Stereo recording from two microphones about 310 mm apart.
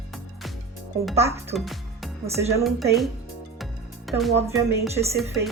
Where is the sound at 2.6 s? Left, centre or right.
Centre.